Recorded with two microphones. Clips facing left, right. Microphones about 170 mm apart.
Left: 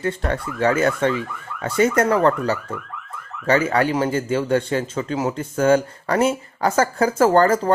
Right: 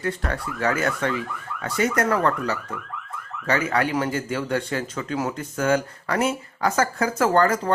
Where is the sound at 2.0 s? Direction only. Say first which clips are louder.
Left 4 dB; 25° left (ahead or behind).